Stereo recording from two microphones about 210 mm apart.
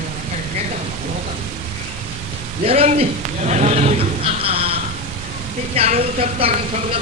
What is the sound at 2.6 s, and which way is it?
A man's voice, 30° right (ahead or behind).